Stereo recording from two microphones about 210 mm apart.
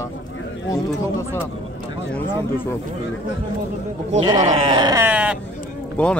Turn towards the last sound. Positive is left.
turn(degrees=5)  # may be behind; listen again after turning